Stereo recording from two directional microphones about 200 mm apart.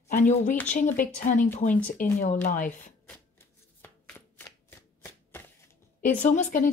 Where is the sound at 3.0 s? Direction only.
10° left (ahead or behind).